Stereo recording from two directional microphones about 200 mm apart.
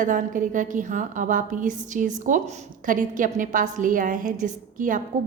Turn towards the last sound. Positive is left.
turn(degrees=-40)  # may be behind; listen again after turning